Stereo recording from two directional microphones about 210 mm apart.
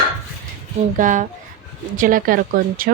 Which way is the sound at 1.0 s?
35° right (ahead or behind).